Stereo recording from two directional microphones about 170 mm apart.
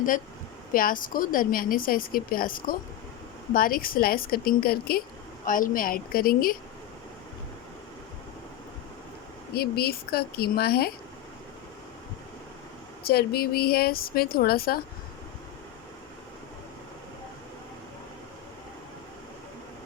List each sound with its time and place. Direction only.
0.7 s speech: 55° left (ahead or behind)
9.6 s speech: 65° left (ahead or behind)
13.1 s speech: 65° left (ahead or behind)